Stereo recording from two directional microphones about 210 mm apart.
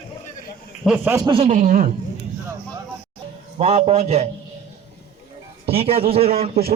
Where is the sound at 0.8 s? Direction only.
10° right (ahead or behind).